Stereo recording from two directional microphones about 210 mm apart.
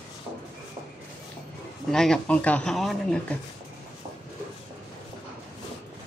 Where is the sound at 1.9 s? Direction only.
5° left (ahead or behind).